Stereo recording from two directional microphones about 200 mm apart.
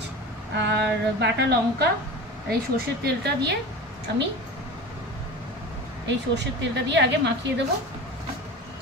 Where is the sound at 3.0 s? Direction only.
55° right (ahead or behind).